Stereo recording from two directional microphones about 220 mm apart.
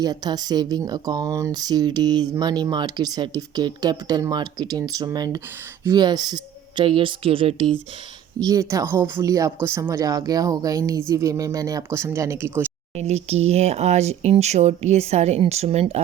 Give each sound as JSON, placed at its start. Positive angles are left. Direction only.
{"t": 0.0, "sound": "speech", "side_deg": -20}
{"t": 13.0, "sound": "speech", "side_deg": -30}